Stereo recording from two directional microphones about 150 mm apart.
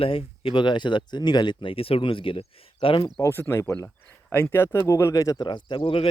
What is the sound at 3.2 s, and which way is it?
Speech, 15° left (ahead or behind).